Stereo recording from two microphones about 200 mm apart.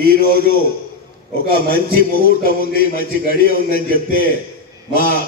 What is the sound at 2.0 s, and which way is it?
A man's voice, 50° left (ahead or behind).